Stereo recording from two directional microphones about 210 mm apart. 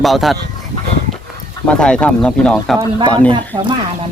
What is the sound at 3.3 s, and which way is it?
Speech, 20° right (ahead or behind).